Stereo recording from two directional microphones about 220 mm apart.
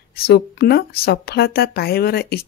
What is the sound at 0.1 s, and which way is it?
Speech, 45° left (ahead or behind).